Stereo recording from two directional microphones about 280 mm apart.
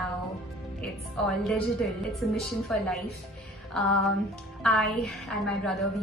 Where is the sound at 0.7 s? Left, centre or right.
Centre.